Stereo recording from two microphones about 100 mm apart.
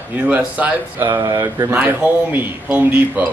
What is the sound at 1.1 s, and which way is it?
Speech, 35° right (ahead or behind).